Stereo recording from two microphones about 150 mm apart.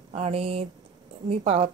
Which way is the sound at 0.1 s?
45° right (ahead or behind).